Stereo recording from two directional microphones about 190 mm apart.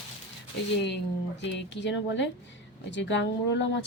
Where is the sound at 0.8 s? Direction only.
65° left (ahead or behind).